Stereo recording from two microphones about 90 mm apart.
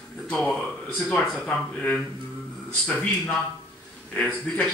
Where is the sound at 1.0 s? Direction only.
15° left (ahead or behind).